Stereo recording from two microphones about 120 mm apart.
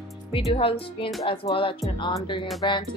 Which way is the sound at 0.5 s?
50° left (ahead or behind).